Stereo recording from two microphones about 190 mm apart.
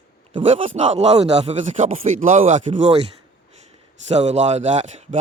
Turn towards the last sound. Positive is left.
turn(degrees=-35)  # may be behind; listen again after turning